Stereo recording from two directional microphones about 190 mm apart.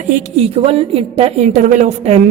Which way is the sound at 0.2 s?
30° right (ahead or behind).